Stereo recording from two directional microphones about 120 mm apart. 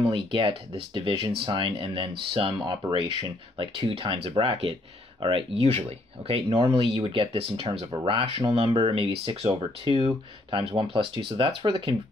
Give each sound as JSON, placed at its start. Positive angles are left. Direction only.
{"t": 0.0, "sound": "speech", "side_deg": -45}